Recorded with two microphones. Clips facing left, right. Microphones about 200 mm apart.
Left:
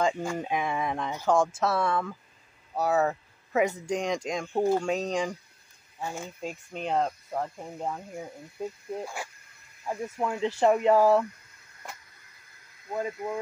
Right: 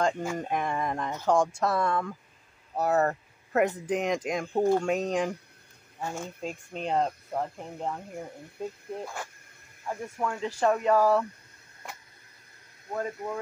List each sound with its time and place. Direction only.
0.0 s speech: 5° right (ahead or behind); by 11.2 s 20° left (ahead or behind)
12.9 s speech: 10° left (ahead or behind)